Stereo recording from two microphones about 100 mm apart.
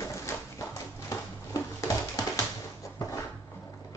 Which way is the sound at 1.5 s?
35° left (ahead or behind).